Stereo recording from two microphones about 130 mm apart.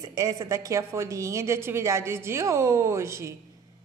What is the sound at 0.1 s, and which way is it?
A woman's voice, 25° right (ahead or behind).